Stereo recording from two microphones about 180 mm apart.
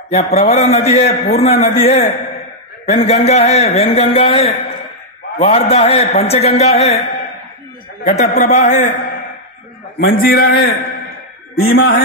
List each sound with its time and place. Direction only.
0.1 s a man's voice: 35° left (ahead or behind)
9.9 s a man's voice: 55° left (ahead or behind)